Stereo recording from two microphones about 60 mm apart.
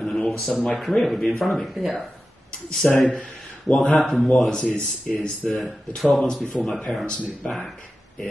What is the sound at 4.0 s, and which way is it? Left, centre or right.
Speech, centre.